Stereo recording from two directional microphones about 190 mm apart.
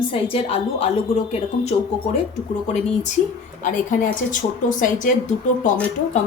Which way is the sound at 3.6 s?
45° left (ahead or behind).